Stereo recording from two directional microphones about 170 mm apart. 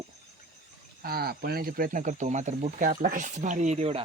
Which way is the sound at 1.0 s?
65° right (ahead or behind).